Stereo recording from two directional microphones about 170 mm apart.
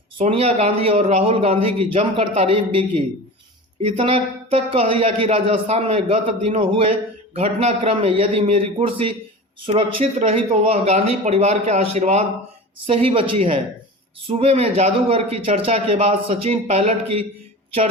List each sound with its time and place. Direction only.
0.2 s a man's voice: 35° right (ahead or behind)